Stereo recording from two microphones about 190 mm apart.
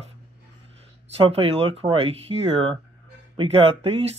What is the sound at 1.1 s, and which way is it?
Speech, 30° right (ahead or behind).